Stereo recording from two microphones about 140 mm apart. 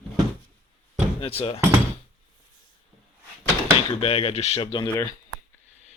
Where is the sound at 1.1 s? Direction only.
45° left (ahead or behind).